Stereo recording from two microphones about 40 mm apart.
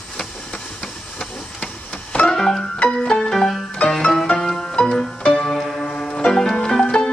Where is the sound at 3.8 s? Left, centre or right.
Left.